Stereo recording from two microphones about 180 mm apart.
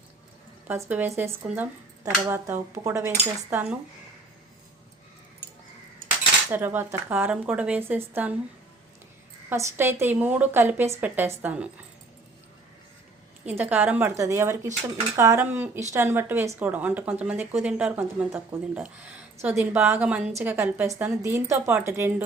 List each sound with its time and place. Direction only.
0.7 s speech: 10° right (ahead or behind)
3.5 s speech: 5° right (ahead or behind)
6.5 s speech: 10° right (ahead or behind)
9.5 s speech: 15° right (ahead or behind)
13.4 s speech: 10° right (ahead or behind)